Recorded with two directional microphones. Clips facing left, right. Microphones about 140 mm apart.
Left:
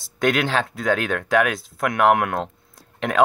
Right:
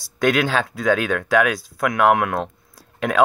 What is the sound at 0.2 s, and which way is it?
Speech, 25° left (ahead or behind).